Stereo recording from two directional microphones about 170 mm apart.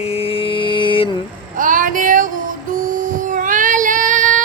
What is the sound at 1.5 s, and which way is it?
Child singing, 50° right (ahead or behind).